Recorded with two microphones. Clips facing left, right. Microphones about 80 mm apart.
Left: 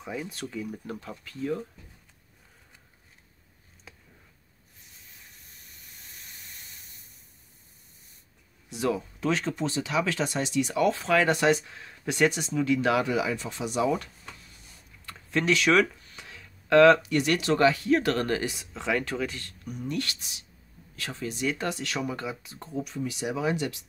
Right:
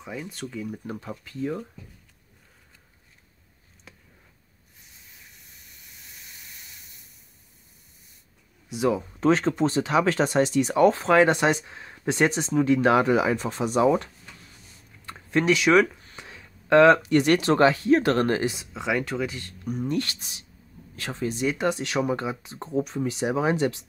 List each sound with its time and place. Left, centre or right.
0.3 s speech: centre
0.7 s speech: centre
8.6 s speech: centre
9.2 s speech: right
11.2 s speech: right
15.0 s speech: right
15.8 s a sound: right
17.1 s speech: right; by 19.3 s centre
19.6 s speech: right
21.5 s speech: right